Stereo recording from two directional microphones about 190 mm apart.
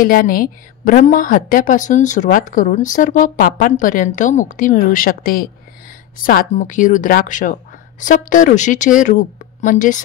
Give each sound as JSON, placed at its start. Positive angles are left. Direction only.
{"t": 0.0, "sound": "a woman's voice", "side_deg": 50}